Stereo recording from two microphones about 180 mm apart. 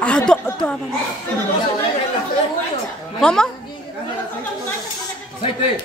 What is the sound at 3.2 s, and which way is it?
Speech, 5° left (ahead or behind).